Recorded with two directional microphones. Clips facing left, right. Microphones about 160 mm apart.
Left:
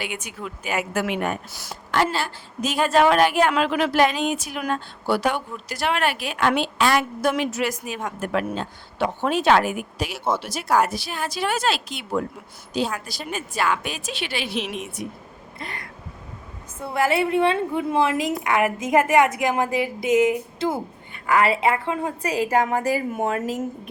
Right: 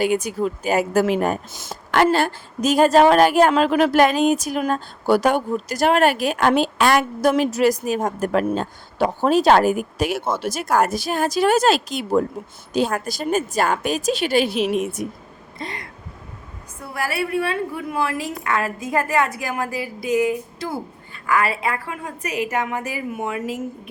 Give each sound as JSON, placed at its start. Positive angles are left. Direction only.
{"t": 0.0, "sound": "speech", "side_deg": -40}
{"t": 2.1, "sound": "a woman's voice", "side_deg": -50}
{"t": 16.8, "sound": "a woman's voice", "side_deg": 20}